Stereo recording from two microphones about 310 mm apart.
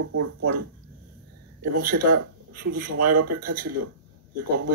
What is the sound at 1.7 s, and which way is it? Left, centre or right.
Speech, right.